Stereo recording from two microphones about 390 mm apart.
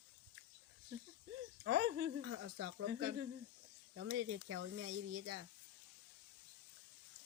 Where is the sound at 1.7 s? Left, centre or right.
Right.